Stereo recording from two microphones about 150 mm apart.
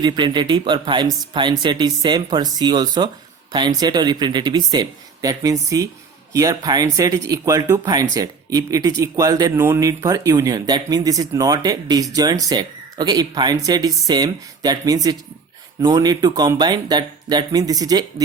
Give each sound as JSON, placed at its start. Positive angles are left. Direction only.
{"t": 0.0, "sound": "speech", "side_deg": -30}